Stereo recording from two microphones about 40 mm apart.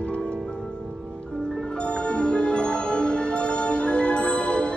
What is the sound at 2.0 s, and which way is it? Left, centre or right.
Music, left.